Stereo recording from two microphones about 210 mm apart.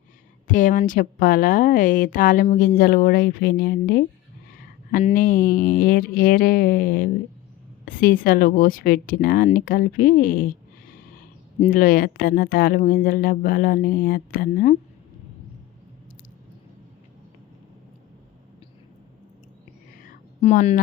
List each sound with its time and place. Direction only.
0.4 s a woman's voice: 40° left (ahead or behind)
11.7 s speech: 40° left (ahead or behind)
20.4 s a woman's voice: 30° left (ahead or behind)